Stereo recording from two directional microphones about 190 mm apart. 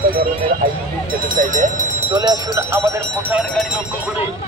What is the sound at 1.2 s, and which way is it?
Speech, 45° right (ahead or behind).